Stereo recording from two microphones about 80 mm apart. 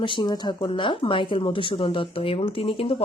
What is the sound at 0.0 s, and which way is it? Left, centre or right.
Speech, left.